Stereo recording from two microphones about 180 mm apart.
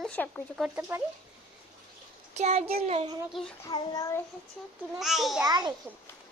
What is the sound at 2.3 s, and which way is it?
Speech, 35° right (ahead or behind).